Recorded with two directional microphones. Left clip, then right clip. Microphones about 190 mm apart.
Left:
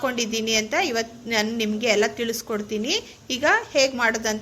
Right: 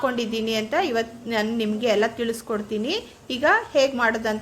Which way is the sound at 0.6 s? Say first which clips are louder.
Even; centre (ahead or behind).